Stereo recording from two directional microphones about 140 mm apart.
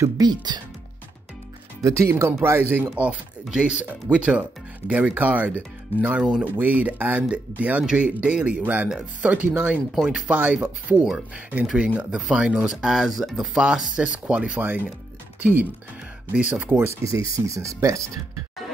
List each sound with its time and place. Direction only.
0.0 s speech: 30° right (ahead or behind)
1.8 s speech: 20° right (ahead or behind)
2.9 s speech: 5° right (ahead or behind)
16.3 s speech: 10° right (ahead or behind)